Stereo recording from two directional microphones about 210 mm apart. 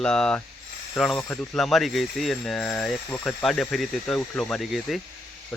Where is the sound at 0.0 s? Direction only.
5° left (ahead or behind).